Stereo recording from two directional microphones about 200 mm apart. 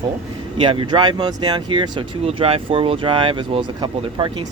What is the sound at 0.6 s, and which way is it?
Speech, 25° right (ahead or behind).